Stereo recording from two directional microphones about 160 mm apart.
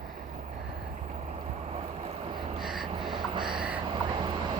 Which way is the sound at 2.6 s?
Centre (ahead or behind).